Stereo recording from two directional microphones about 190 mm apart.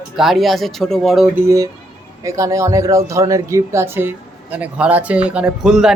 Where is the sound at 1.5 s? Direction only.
20° right (ahead or behind).